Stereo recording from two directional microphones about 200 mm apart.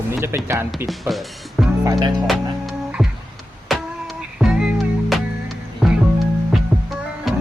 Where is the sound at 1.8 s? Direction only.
20° right (ahead or behind).